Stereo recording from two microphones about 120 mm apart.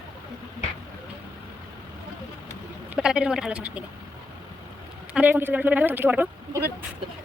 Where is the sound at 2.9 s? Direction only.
10° right (ahead or behind).